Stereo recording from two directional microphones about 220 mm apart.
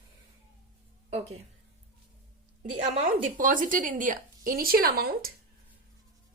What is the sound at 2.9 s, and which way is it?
A woman's voice, 35° right (ahead or behind).